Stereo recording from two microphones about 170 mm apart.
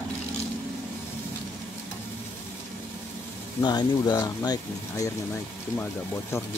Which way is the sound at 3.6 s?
25° left (ahead or behind).